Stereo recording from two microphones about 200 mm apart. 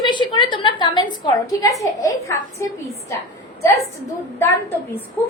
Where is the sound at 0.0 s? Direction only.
20° left (ahead or behind).